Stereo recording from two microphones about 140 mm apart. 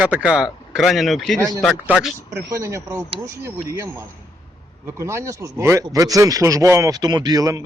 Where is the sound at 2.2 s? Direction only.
20° right (ahead or behind).